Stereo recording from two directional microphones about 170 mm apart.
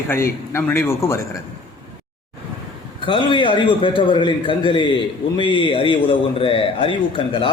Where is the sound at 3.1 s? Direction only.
30° left (ahead or behind).